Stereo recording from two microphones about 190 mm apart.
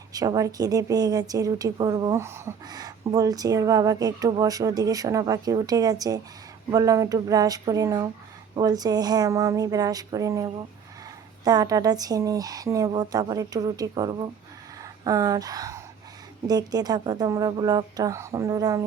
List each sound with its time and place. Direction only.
0.1 s a woman's voice: 20° right (ahead or behind)